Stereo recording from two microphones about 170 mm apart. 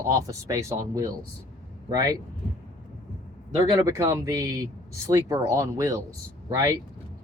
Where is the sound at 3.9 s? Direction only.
20° right (ahead or behind).